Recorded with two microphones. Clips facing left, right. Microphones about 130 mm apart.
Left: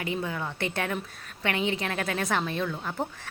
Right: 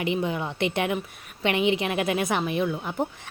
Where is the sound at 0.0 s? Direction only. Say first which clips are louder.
Right 5 dB; 20° right (ahead or behind).